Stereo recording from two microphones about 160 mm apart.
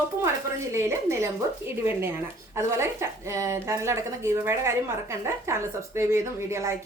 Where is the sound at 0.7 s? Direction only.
15° right (ahead or behind).